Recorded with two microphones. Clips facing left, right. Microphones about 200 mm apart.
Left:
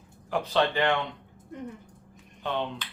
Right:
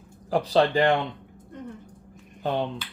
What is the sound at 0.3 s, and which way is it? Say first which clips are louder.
Speech: right 5 dB; 35° right (ahead or behind).